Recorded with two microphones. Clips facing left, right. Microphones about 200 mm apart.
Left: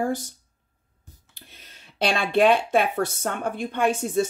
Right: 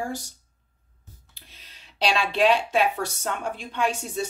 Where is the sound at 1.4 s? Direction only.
55° left (ahead or behind).